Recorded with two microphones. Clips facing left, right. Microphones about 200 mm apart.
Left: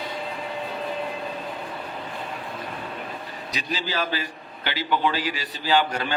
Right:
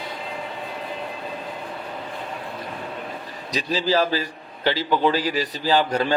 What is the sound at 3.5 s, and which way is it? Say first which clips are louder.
A man's voice: right 8 dB; 35° right (ahead or behind).